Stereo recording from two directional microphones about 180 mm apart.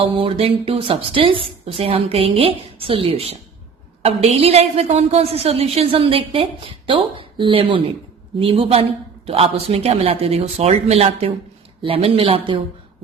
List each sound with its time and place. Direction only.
0.0 s a woman's voice: 30° right (ahead or behind)